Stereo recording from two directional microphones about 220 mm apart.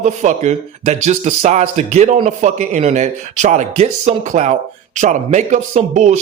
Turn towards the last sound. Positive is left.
turn(degrees=-35)  # may be behind; listen again after turning